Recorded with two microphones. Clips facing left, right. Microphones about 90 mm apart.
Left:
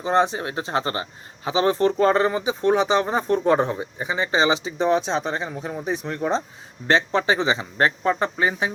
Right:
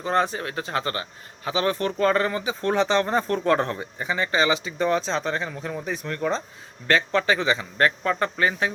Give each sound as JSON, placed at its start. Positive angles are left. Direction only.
{"t": 0.0, "sound": "speech", "side_deg": 20}